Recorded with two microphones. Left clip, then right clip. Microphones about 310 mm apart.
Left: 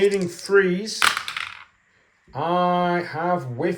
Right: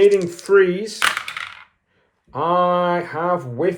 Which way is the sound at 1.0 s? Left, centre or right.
Centre.